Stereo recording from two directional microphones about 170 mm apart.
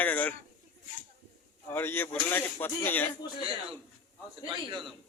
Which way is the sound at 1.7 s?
15° left (ahead or behind).